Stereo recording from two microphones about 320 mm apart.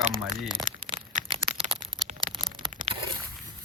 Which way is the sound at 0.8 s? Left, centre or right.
Centre.